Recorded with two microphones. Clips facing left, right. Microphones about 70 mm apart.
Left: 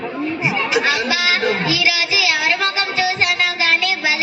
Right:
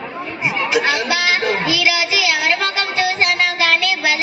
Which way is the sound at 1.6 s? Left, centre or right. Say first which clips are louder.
Right 1 dB; right.